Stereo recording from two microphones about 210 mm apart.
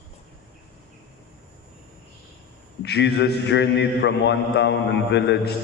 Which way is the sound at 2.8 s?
55° left (ahead or behind).